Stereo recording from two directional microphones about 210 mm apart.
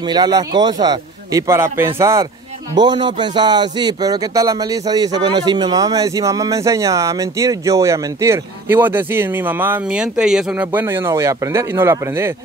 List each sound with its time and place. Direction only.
0.1 s a man's voice: 20° right (ahead or behind)